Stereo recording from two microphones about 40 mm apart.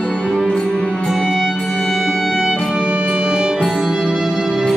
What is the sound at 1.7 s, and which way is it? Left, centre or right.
Music, centre.